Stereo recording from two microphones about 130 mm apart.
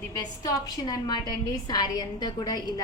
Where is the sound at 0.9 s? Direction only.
30° left (ahead or behind).